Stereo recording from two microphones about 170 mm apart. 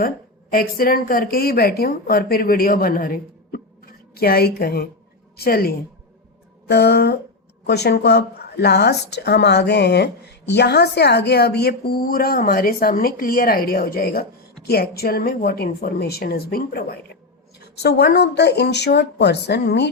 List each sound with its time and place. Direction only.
0.5 s a woman's voice: 60° left (ahead or behind)
6.7 s a woman's voice: 80° left